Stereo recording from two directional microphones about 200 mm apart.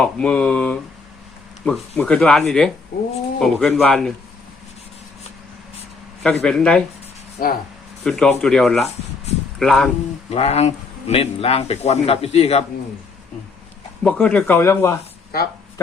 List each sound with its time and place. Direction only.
0.0 s speech: 5° left (ahead or behind)
6.2 s speech: 5° left (ahead or behind)
7.4 s speech: 45° left (ahead or behind)
8.0 s speech: 5° left (ahead or behind)
10.2 s a man's voice: 30° left (ahead or behind)
14.0 s speech: 5° left (ahead or behind)